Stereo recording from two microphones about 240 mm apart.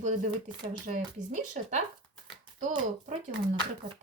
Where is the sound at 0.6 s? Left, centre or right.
Right.